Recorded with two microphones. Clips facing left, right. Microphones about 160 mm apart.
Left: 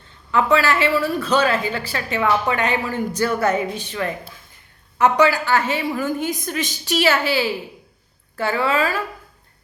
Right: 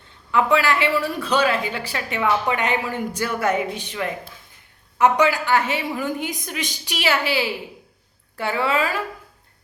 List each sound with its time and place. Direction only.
0.5 s a woman's voice: 15° right (ahead or behind)